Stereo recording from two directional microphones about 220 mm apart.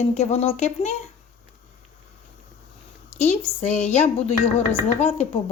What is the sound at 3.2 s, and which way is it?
A woman's voice, 30° left (ahead or behind).